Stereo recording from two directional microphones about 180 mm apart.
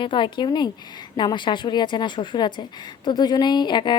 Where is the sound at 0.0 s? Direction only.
25° left (ahead or behind).